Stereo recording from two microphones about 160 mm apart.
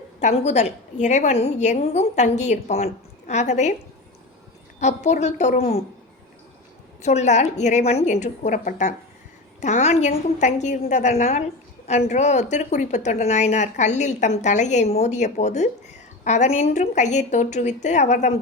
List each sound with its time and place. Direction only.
0.2 s a woman's voice: 45° left (ahead or behind)
4.8 s a woman's voice: 45° left (ahead or behind)
7.0 s a woman's voice: 45° left (ahead or behind)